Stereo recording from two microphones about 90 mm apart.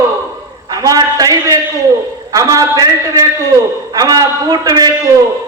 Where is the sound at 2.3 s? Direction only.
40° right (ahead or behind).